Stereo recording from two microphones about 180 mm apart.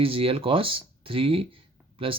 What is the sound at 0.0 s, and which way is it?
Speech, 30° right (ahead or behind).